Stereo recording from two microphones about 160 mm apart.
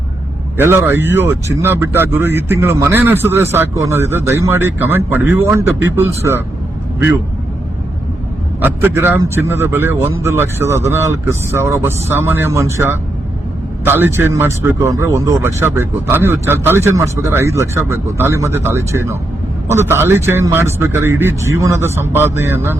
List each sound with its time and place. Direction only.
0.5 s speech: 15° right (ahead or behind)
8.6 s speech: 10° right (ahead or behind)